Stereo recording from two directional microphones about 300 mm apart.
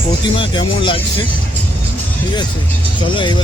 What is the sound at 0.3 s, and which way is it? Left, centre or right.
Speech, centre.